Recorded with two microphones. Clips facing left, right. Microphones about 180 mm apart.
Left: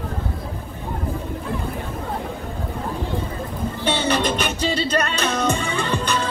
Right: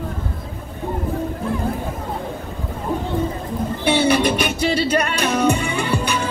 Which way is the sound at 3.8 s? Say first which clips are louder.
Right 4 dB; 10° right (ahead or behind).